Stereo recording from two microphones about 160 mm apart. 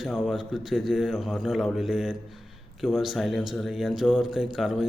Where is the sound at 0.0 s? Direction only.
Centre (ahead or behind).